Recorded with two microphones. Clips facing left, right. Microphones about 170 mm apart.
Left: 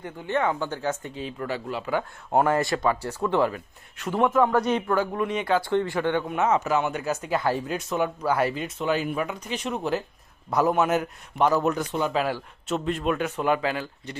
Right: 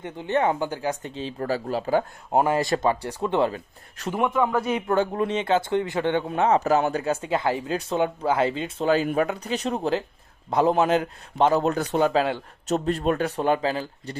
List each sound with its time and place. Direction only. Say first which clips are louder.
0.0 s speech: right 2 dB; 20° right (ahead or behind)
1.1 s a man's voice: right 3 dB; 35° right (ahead or behind)
2.4 s speech: right 1 dB; 20° right (ahead or behind)
4.2 s a man's voice: left 2 dB; centre (ahead or behind)
4.9 s a man's voice: right 2 dB; 30° right (ahead or behind)
12.6 s a man's voice: right 3 dB; 40° right (ahead or behind)